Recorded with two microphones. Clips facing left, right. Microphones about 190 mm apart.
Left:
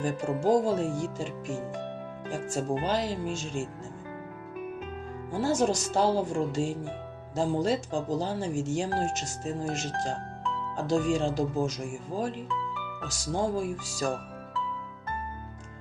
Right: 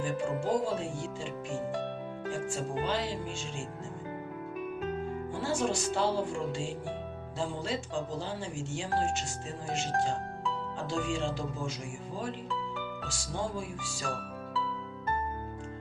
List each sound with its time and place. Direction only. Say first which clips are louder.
0.0 s speech: left 4 dB; 40° left (ahead or behind)
2.5 s speech: left 6 dB; 40° left (ahead or behind)
5.3 s speech: left 6 dB; 40° left (ahead or behind)
10.8 s speech: left 8 dB; 40° left (ahead or behind)